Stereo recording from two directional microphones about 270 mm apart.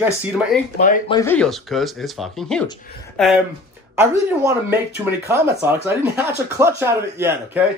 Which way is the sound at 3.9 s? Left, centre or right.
Centre.